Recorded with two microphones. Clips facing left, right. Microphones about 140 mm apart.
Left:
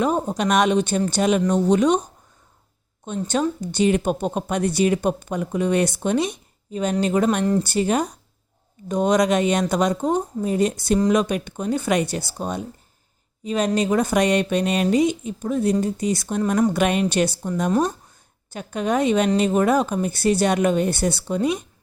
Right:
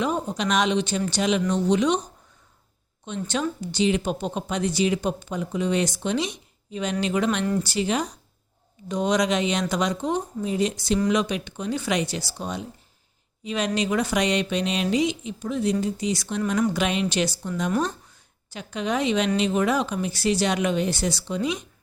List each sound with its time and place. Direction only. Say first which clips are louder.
0.0 s speech: left 4 dB; 45° left (ahead or behind)
3.2 s speech: left 5 dB; 45° left (ahead or behind)
7.6 s speech: left 4 dB; 50° left (ahead or behind)
17.7 s speech: left 4 dB; 35° left (ahead or behind)
18.5 s speech: left 4 dB; 50° left (ahead or behind)